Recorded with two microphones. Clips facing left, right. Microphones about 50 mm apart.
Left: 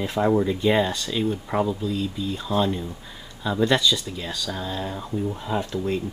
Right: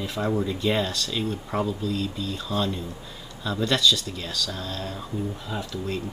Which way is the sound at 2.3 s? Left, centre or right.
Centre.